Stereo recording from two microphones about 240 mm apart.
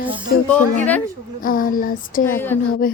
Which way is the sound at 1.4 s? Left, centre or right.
Left.